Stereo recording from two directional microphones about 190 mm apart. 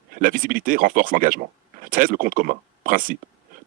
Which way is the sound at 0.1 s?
45° right (ahead or behind).